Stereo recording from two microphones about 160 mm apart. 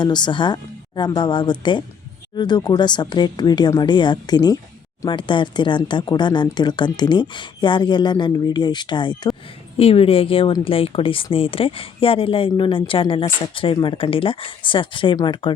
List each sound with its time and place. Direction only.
0.0 s speech: 25° left (ahead or behind)